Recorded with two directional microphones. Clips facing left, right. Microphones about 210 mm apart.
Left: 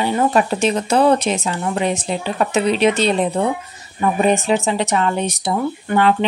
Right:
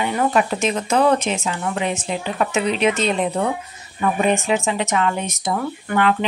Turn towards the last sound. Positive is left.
turn(degrees=30)  # may be behind; listen again after turning